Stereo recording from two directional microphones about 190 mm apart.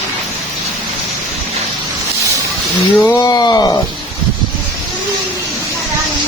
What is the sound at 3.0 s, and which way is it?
Speech, 20° left (ahead or behind).